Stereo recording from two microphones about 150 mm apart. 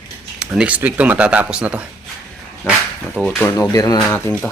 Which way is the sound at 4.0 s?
5° left (ahead or behind).